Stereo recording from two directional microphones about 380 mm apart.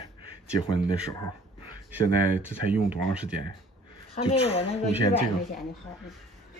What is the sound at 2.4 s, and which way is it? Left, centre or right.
Speech, centre.